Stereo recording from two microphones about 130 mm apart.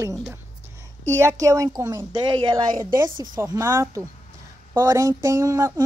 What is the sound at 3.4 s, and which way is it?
Speech, 20° right (ahead or behind).